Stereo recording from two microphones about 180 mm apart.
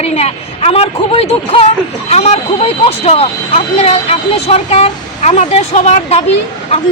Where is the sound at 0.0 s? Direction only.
35° left (ahead or behind).